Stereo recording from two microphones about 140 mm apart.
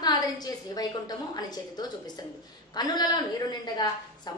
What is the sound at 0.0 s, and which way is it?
A woman's voice, 30° left (ahead or behind).